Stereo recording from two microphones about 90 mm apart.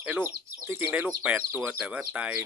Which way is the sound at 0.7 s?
30° right (ahead or behind).